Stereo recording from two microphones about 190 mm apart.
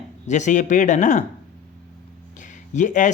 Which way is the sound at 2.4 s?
40° left (ahead or behind).